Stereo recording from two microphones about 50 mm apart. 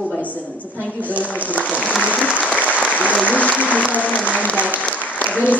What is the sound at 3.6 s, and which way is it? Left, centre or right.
Speech, left.